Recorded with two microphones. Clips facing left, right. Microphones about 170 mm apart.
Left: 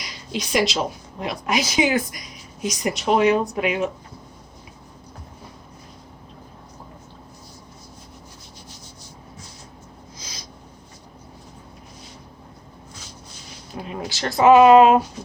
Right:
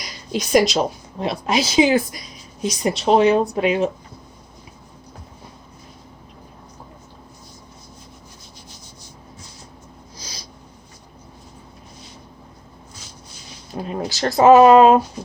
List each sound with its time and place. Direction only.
0.0 s a woman's voice: 45° right (ahead or behind)
10.2 s snort: 35° right (ahead or behind)
13.8 s speech: 35° right (ahead or behind)